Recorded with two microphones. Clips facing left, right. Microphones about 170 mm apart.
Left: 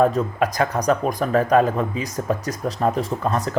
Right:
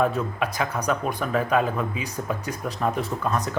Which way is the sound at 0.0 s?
35° left (ahead or behind).